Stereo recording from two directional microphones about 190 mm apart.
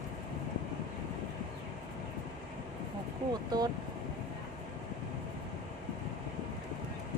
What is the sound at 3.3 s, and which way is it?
Speech, 20° right (ahead or behind).